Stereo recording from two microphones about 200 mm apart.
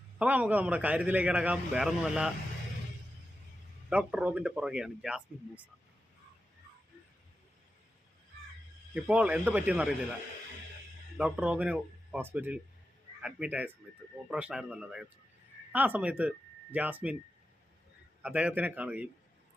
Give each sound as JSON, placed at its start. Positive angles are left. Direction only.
{"t": 0.2, "sound": "a man's voice", "side_deg": -5}
{"t": 3.8, "sound": "speech", "side_deg": -5}
{"t": 9.0, "sound": "a man's voice", "side_deg": -5}
{"t": 11.2, "sound": "a man's voice", "side_deg": -5}
{"t": 18.2, "sound": "a man's voice", "side_deg": -5}